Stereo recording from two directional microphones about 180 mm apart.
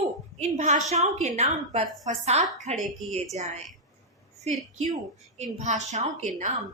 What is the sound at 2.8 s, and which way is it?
Speech, centre (ahead or behind).